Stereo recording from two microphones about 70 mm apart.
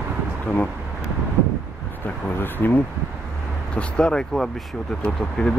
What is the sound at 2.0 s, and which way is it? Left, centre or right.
Speech, left.